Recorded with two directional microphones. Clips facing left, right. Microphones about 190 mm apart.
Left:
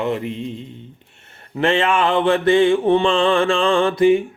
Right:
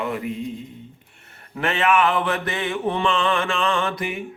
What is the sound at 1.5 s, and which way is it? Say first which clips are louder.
Mantra: left 3 dB; 30° left (ahead or behind).